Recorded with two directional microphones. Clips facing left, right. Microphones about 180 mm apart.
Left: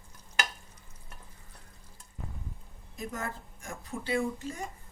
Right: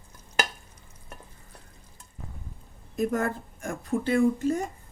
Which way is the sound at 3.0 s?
55° right (ahead or behind).